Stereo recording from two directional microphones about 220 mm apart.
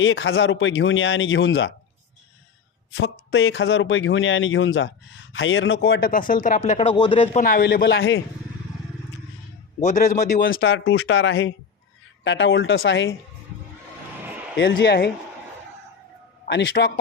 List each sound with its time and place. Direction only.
0.0 s speech: 55° left (ahead or behind)
2.9 s speech: 60° left (ahead or behind)
6.1 s speech: 40° left (ahead or behind)
7.4 s a man's voice: 40° left (ahead or behind)
7.9 s speech: 60° left (ahead or behind)
9.8 s speech: 35° left (ahead or behind); by 13.1 s 60° left (ahead or behind)
14.7 s a man's voice: 50° left (ahead or behind)
16.5 s a man's voice: 50° left (ahead or behind)